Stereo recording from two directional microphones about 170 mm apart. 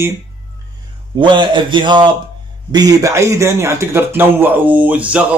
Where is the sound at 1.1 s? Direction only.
25° right (ahead or behind).